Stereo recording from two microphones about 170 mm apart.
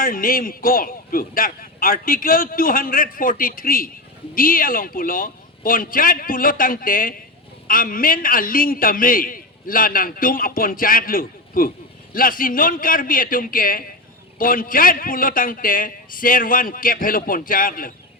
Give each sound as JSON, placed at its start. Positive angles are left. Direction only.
{"t": 0.0, "sound": "a man's voice", "side_deg": 55}